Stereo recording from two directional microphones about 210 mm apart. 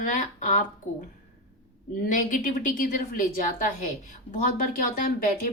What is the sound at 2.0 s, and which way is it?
Speech, 40° left (ahead or behind).